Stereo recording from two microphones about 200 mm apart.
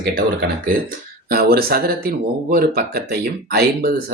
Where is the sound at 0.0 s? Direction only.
50° right (ahead or behind).